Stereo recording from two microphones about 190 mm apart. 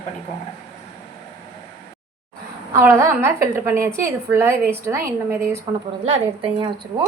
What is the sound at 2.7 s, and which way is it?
A woman's voice, 15° right (ahead or behind).